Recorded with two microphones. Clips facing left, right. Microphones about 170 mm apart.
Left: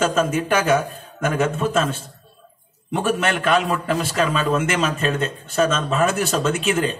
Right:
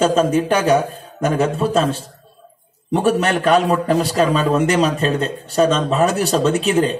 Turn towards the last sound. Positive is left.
turn(degrees=-35)  # may be behind; listen again after turning